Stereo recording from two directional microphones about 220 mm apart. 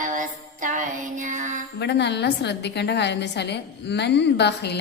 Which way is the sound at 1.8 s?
50° left (ahead or behind).